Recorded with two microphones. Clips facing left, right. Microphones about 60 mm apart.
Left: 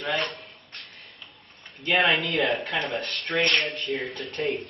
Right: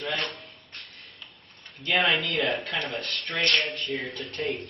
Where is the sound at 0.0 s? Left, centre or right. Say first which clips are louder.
Left 3 dB; centre.